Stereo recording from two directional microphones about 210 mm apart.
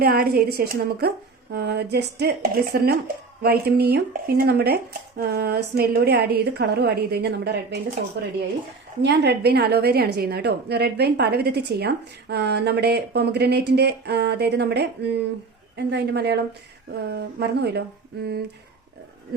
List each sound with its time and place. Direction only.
0.0 s a woman's voice: 45° right (ahead or behind)
9.0 s a woman's voice: 55° right (ahead or behind)